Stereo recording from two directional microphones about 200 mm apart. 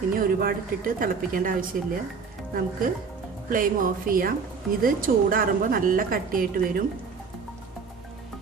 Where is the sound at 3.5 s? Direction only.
45° right (ahead or behind).